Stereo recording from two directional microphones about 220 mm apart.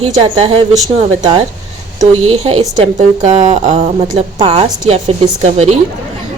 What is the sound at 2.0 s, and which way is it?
Speech, 25° right (ahead or behind).